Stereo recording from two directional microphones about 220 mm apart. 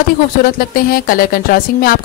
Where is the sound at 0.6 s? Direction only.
40° left (ahead or behind).